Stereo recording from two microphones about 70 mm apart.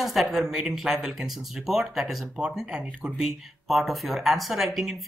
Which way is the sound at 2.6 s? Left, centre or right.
Centre.